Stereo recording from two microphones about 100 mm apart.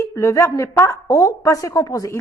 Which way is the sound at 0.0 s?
30° left (ahead or behind).